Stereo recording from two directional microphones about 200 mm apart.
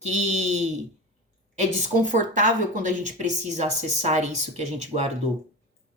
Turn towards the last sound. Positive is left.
turn(degrees=-35)  # may be behind; listen again after turning